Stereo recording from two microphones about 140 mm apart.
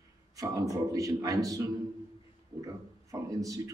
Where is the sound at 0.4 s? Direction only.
25° right (ahead or behind).